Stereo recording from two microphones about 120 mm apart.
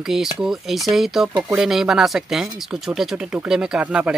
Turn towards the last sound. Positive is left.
turn(degrees=-10)  # may be behind; listen again after turning